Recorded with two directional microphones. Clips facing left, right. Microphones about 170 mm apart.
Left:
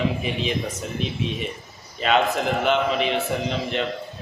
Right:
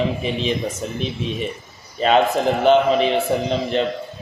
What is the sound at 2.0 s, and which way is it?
A man's voice, 35° right (ahead or behind).